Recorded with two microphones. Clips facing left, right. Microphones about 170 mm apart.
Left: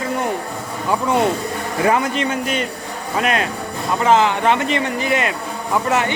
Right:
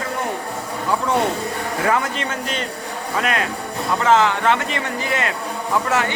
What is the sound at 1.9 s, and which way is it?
Speech, 15° left (ahead or behind).